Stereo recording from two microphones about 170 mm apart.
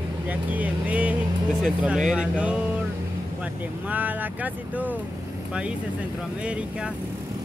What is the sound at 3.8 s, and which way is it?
Speech, 10° right (ahead or behind).